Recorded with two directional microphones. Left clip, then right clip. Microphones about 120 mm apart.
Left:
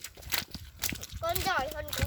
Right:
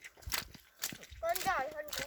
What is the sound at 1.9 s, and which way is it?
Speech, 40° right (ahead or behind).